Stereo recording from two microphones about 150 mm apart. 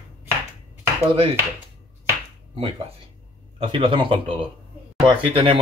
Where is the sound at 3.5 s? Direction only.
35° right (ahead or behind).